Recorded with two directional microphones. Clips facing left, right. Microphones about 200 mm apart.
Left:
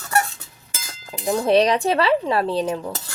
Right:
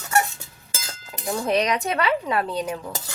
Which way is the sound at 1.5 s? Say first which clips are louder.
Left 6 dB; 30° left (ahead or behind).